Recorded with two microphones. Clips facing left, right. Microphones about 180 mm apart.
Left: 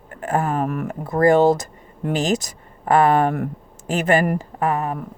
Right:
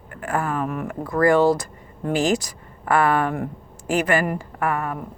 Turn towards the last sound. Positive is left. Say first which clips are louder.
# left 3 dB
turn(degrees=20)  # may be behind; listen again after turning